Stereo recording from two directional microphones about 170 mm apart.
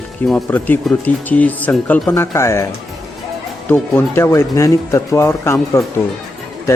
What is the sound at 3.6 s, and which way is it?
Speech, 10° left (ahead or behind).